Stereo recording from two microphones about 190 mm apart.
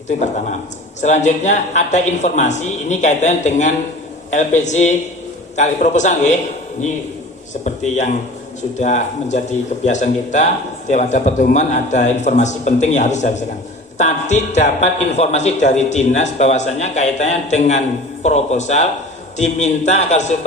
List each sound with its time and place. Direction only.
1.0 s a man's voice: 40° left (ahead or behind)
7.6 s a man's voice: 40° left (ahead or behind)